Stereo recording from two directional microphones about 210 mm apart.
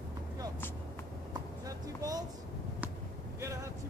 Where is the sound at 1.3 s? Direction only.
15° right (ahead or behind).